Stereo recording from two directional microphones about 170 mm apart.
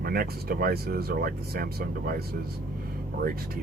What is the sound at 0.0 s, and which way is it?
Speech, 60° right (ahead or behind).